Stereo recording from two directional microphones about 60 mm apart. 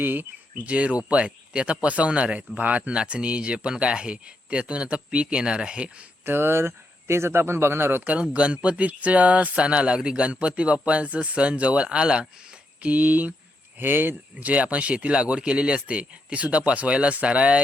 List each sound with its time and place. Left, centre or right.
0.0 s speech: right
0.7 s speech: right
6.2 s speech: right
8.0 s speech: right
14.3 s speech: right